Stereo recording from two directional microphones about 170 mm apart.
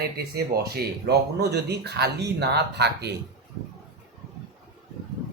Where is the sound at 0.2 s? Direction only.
70° right (ahead or behind).